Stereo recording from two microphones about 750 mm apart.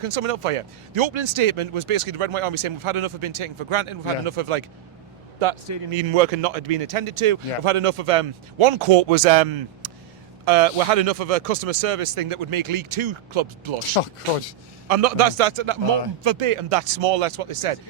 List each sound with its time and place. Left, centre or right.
0.0 s speech: right
14.0 s speech: left
14.8 s speech: right